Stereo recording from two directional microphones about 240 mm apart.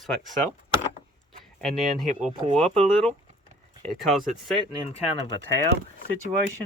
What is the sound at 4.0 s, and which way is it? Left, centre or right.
Speech, centre.